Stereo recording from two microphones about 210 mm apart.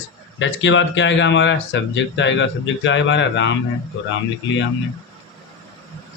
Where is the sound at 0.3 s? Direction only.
60° left (ahead or behind).